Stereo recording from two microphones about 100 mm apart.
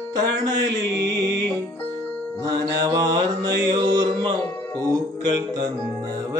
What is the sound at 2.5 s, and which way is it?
Mantra, 40° right (ahead or behind).